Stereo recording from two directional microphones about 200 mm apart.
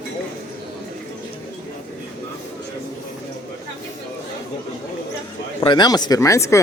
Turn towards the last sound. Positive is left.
turn(degrees=15)  # may be behind; listen again after turning